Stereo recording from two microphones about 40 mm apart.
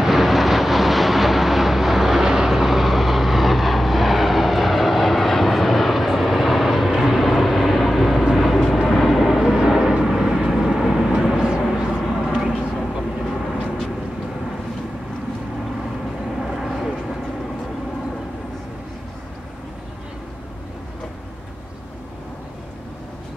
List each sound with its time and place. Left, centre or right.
0.0 s vehicle: centre
12.5 s vehicle: centre
16.3 s vehicle: centre